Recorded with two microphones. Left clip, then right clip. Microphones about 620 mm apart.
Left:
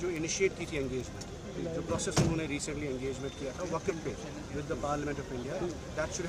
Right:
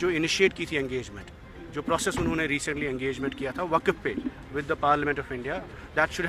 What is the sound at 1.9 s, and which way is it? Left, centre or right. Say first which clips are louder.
Speech: right 6 dB; right.